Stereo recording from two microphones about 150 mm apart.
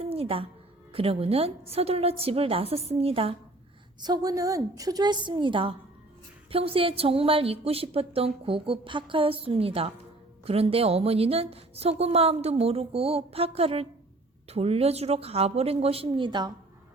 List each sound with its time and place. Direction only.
0.0 s a sound: 40° right (ahead or behind)
0.9 s speech: 40° right (ahead or behind)
4.0 s a woman's voice: 25° right (ahead or behind)